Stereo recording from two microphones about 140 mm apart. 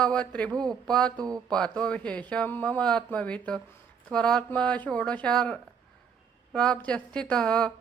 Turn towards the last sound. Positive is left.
turn(degrees=5)  # may be behind; listen again after turning